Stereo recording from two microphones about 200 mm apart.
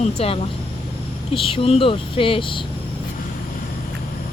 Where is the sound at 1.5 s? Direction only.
30° left (ahead or behind).